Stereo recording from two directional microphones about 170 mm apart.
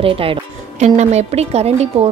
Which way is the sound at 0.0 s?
30° right (ahead or behind).